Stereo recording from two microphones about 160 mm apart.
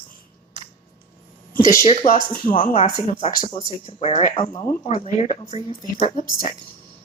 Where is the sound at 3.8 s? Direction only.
45° left (ahead or behind).